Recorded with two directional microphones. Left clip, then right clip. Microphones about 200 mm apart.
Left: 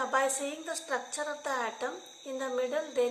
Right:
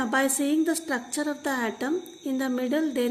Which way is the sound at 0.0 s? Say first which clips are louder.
Right 4 dB; 50° right (ahead or behind).